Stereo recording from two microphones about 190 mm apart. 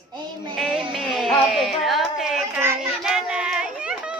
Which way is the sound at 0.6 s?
Centre (ahead or behind).